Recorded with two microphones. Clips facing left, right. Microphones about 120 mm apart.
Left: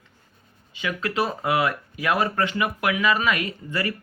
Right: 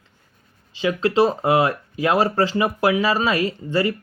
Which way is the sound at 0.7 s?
30° right (ahead or behind).